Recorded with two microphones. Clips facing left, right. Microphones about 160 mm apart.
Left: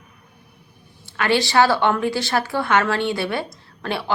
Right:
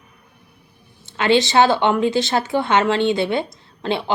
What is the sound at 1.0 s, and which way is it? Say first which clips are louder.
Speech: right 4 dB; 20° right (ahead or behind).